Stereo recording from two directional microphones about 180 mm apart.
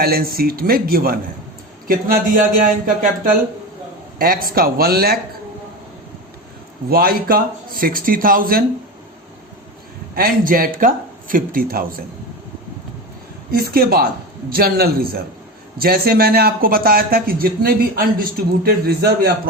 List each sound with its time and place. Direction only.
0.0 s speech: 55° right (ahead or behind)
6.9 s speech: 55° right (ahead or behind)
10.2 s speech: 50° right (ahead or behind)
13.5 s speech: 60° right (ahead or behind)